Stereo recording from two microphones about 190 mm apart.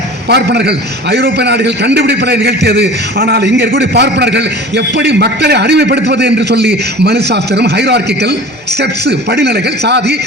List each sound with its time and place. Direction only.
0.3 s a man's voice: 60° right (ahead or behind)